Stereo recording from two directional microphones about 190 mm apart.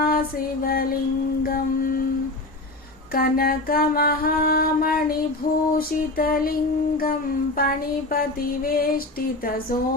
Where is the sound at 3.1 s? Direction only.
50° left (ahead or behind).